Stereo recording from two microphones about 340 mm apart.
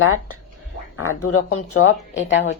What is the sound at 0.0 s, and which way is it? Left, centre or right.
Speech, left.